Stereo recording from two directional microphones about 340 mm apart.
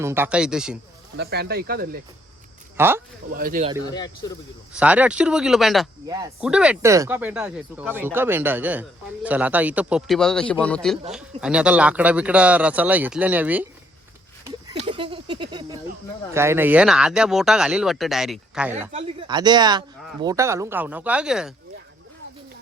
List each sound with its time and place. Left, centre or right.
0.0 s speech: centre
1.1 s speech: right
2.7 s speech: centre
3.3 s speech: right
3.8 s speech: centre
4.7 s speech: centre
14.7 s a sound: centre
16.3 s speech: centre
18.9 s speech: centre